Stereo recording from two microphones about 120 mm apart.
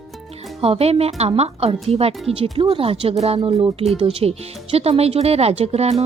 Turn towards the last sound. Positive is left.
turn(degrees=-60)  # may be behind; listen again after turning